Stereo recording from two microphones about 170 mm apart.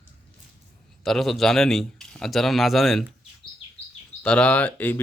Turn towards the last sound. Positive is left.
turn(degrees=10)  # may be behind; listen again after turning